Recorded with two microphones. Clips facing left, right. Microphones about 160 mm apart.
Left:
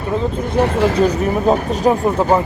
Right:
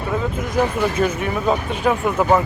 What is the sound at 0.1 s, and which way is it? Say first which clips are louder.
Speech: left 4 dB; 30° left (ahead or behind).